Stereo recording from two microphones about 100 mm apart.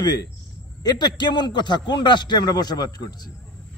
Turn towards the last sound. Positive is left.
turn(degrees=40)  # may be behind; listen again after turning